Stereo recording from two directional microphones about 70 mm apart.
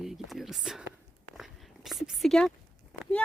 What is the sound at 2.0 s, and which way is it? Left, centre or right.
Speech, centre.